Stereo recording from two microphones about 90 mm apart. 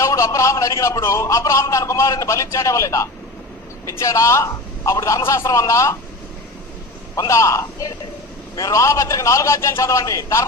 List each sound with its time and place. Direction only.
0.0 s a man's voice: 35° left (ahead or behind)
7.2 s a man's voice: 35° left (ahead or behind)